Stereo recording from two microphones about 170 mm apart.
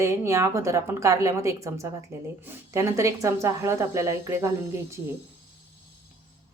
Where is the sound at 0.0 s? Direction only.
15° right (ahead or behind).